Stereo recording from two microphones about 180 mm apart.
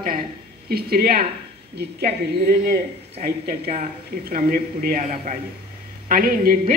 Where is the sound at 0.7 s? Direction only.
60° right (ahead or behind).